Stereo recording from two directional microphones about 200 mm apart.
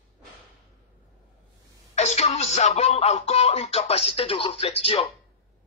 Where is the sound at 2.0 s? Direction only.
35° left (ahead or behind).